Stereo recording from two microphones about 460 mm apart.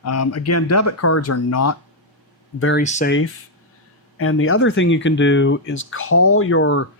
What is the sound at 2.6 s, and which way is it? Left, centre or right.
Speech, left.